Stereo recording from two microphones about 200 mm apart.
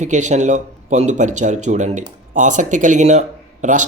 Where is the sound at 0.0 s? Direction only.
35° right (ahead or behind).